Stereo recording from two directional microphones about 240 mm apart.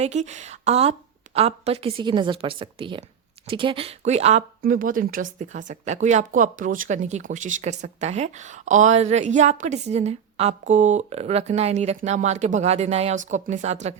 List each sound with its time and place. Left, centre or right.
0.0 s speech: right